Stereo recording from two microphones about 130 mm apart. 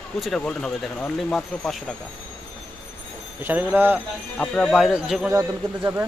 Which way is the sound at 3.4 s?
15° right (ahead or behind).